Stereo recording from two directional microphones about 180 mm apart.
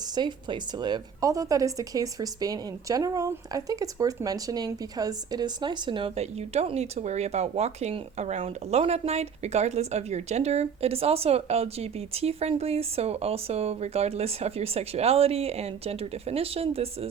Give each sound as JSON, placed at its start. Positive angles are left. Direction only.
{"t": 0.2, "sound": "a woman's voice", "side_deg": -25}